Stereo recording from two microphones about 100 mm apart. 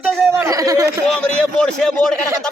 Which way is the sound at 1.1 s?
10° left (ahead or behind).